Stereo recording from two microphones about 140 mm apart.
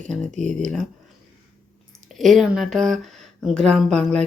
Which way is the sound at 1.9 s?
Centre (ahead or behind).